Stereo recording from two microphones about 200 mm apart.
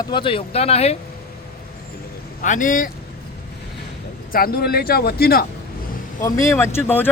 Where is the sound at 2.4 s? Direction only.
40° left (ahead or behind).